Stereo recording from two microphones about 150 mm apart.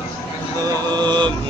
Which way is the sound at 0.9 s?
30° right (ahead or behind).